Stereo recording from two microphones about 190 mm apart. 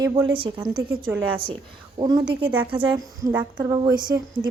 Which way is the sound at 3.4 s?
25° right (ahead or behind).